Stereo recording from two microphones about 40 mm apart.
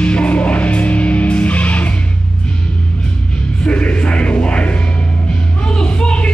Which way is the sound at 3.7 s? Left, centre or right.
Left.